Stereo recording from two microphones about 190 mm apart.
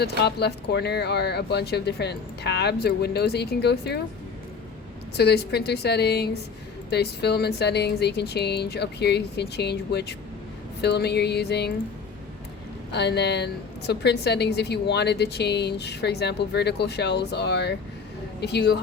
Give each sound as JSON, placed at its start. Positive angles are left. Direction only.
{"t": 0.2, "sound": "a woman's voice", "side_deg": 60}
{"t": 5.1, "sound": "a woman's voice", "side_deg": 60}
{"t": 12.9, "sound": "a woman's voice", "side_deg": 60}